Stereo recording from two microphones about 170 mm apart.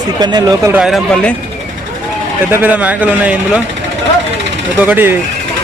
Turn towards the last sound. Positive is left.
turn(degrees=-10)  # may be behind; listen again after turning